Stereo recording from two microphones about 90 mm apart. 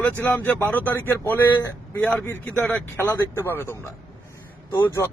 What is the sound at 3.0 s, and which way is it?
Speech, 30° left (ahead or behind).